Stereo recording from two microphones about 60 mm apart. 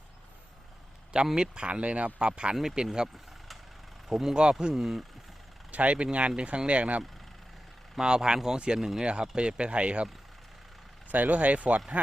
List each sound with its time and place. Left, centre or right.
1.3 s speech: centre
4.1 s speech: centre
4.7 s speech: centre
5.7 s speech: right
7.9 s speech: centre
11.1 s speech: right